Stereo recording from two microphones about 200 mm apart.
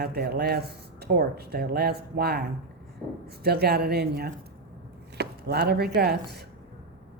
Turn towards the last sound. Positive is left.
turn(degrees=-55)  # may be behind; listen again after turning